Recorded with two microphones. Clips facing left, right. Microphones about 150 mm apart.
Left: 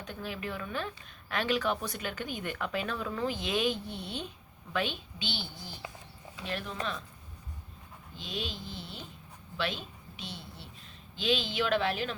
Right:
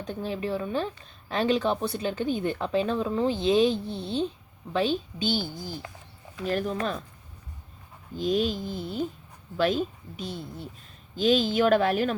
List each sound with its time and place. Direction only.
0.0 s a woman's voice: 30° right (ahead or behind)
8.1 s speech: 45° right (ahead or behind)